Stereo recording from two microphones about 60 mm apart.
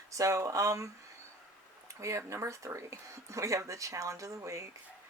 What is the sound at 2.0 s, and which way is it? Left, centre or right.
Speech, right.